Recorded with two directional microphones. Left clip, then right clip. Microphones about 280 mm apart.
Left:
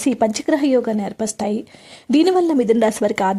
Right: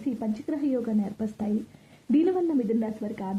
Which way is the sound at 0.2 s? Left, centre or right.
Left.